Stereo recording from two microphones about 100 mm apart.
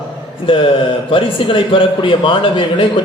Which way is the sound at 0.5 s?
60° left (ahead or behind).